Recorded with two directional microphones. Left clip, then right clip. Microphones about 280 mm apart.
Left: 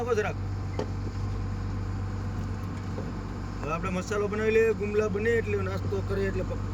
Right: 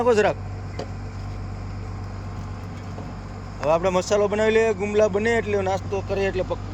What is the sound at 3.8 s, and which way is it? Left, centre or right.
Speech, centre.